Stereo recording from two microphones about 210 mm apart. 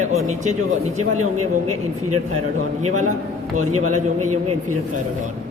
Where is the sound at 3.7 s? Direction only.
90° right.